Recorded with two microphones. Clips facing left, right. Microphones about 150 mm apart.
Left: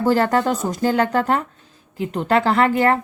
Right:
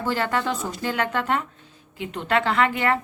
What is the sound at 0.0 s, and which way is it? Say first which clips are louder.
Speech: left 7 dB; 40° left (ahead or behind).